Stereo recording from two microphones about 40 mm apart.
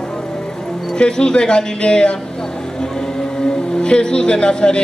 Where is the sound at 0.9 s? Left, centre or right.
Centre.